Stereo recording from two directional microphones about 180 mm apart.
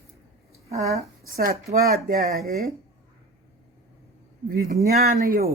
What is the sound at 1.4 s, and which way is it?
Speech, 55° right (ahead or behind).